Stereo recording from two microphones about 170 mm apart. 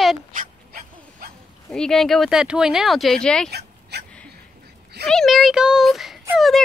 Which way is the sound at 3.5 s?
75° right (ahead or behind).